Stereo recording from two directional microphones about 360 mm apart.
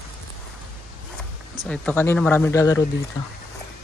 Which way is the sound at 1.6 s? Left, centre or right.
Centre.